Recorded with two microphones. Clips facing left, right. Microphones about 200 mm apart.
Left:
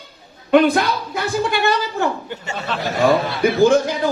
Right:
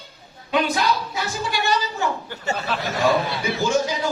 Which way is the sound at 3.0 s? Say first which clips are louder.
Left 6 dB; 55° left (ahead or behind).